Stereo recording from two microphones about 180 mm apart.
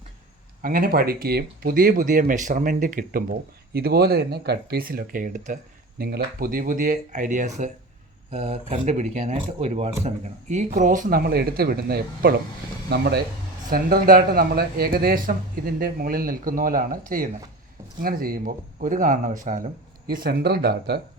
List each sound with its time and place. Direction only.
0.6 s speech: 50° right (ahead or behind)
6.0 s speech: 60° right (ahead or behind)
13.7 s speech: 50° right (ahead or behind)